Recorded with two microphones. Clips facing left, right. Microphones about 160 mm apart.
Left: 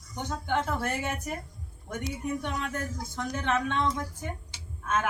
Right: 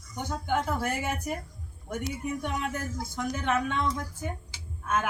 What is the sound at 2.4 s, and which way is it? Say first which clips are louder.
A man's voice: right 1 dB; 10° right (ahead or behind).